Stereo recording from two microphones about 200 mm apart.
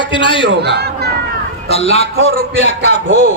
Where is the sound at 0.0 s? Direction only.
25° left (ahead or behind).